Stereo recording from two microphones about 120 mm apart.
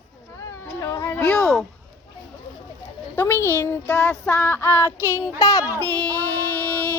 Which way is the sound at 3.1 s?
20° left (ahead or behind).